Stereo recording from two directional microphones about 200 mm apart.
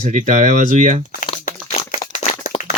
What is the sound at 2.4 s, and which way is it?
Clapping, 35° left (ahead or behind).